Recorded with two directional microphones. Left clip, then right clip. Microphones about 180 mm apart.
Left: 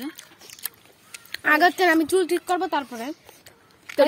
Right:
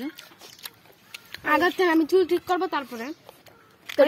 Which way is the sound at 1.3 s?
20° left (ahead or behind).